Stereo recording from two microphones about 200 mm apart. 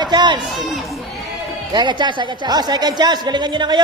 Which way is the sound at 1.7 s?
20° right (ahead or behind).